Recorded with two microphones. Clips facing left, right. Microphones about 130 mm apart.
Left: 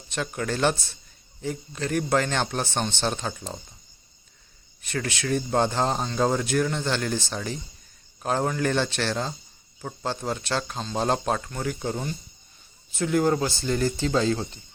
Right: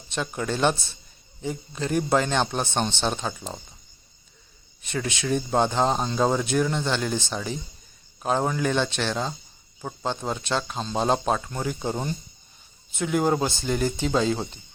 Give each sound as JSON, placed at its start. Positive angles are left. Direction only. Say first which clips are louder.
{"t": 0.1, "sound": "speech", "louder": "right 1 dB", "side_deg": -20}
{"t": 3.2, "sound": "speech", "louder": "right 1 dB", "side_deg": -5}
{"t": 5.0, "sound": "speech", "louder": "right 1 dB", "side_deg": -20}